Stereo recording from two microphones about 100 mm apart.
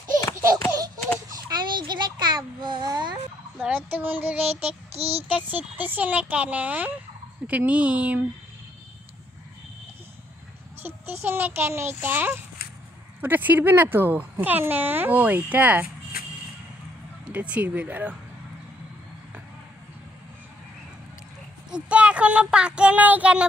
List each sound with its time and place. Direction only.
1.5 s a sound: 50° right (ahead or behind)
3.5 s child singing: 15° right (ahead or behind)
4.4 s child singing: 90° right
5.1 s a child's voice: 15° right (ahead or behind)
11.2 s a child's voice: 20° right (ahead or behind)
17.2 s speech: 15° right (ahead or behind)
21.6 s a child's voice: 10° right (ahead or behind)